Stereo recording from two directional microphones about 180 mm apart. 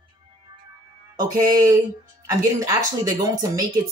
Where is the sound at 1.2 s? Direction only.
20° right (ahead or behind).